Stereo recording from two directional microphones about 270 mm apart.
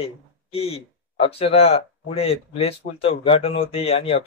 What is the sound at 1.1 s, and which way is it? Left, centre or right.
Speech, left.